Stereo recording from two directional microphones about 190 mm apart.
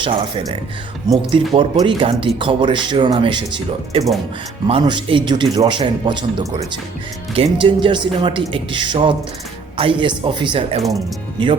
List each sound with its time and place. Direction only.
0.0 s speech: 30° right (ahead or behind)